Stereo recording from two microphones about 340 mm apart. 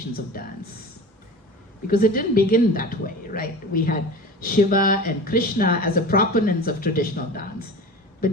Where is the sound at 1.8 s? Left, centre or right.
Left.